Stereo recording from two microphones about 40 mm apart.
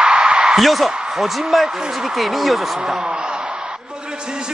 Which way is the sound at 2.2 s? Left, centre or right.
Centre.